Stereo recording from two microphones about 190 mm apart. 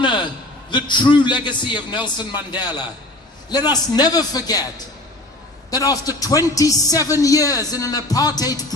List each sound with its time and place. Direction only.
0.7 s a man's voice: 25° left (ahead or behind)
5.7 s a man's voice: 20° left (ahead or behind)